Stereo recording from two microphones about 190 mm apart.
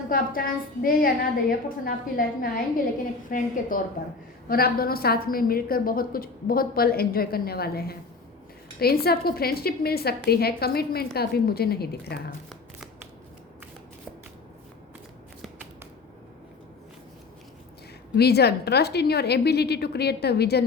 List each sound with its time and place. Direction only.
0.1 s a woman's voice: 50° left (ahead or behind)
18.2 s a woman's voice: 60° left (ahead or behind)